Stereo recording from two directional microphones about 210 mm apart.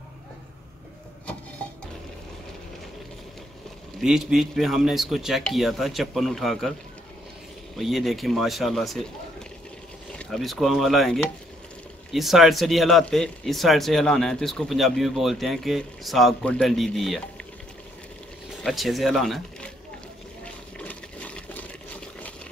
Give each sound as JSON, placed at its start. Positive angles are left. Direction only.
{"t": 4.0, "sound": "speech", "side_deg": 0}
{"t": 7.7, "sound": "speech", "side_deg": 0}
{"t": 10.1, "sound": "speech", "side_deg": 0}
{"t": 18.6, "sound": "speech", "side_deg": 0}
{"t": 20.7, "sound": "water", "side_deg": 5}